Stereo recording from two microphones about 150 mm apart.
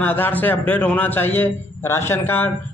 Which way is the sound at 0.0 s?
10° left (ahead or behind).